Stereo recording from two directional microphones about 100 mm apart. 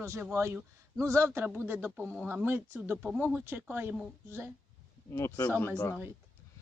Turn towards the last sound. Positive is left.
turn(degrees=25)  # may be behind; listen again after turning